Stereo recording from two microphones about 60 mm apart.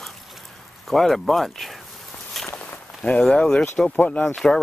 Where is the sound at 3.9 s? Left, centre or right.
Left.